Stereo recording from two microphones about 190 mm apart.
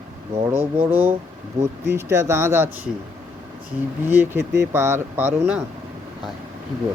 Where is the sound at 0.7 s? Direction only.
10° right (ahead or behind).